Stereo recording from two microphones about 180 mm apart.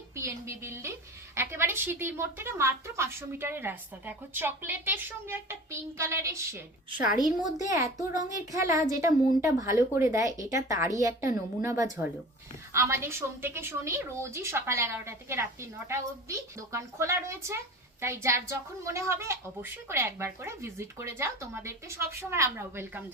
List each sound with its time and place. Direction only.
0.2 s speech: 15° right (ahead or behind)
7.7 s speech: 20° right (ahead or behind)